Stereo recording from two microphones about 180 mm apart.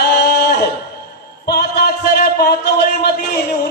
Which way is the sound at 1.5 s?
60° left (ahead or behind).